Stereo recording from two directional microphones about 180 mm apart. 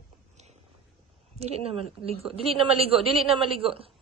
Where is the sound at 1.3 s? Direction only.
35° right (ahead or behind).